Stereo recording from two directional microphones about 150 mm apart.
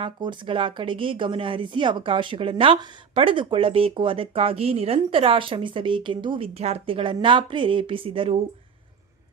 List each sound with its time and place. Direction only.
0.0 s speech: 30° right (ahead or behind)